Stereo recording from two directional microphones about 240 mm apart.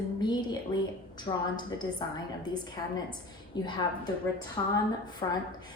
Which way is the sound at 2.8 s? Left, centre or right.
Centre.